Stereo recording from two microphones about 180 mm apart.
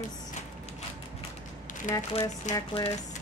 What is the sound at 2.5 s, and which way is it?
Speech, 30° left (ahead or behind).